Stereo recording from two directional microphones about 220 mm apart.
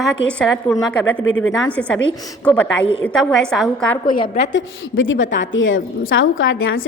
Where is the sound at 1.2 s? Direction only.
60° left (ahead or behind).